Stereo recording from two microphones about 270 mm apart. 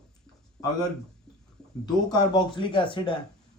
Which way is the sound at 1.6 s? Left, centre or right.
Centre.